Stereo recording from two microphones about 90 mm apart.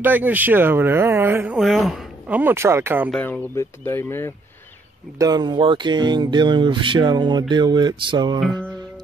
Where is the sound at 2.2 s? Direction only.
20° right (ahead or behind).